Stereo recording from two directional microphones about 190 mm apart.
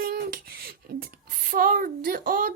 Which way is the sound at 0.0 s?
50° right (ahead or behind).